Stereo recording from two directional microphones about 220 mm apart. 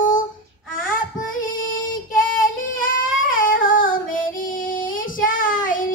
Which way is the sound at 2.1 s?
40° left (ahead or behind).